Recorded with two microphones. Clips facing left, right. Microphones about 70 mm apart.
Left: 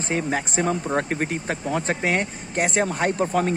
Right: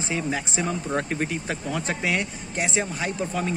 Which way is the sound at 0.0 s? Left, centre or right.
Left.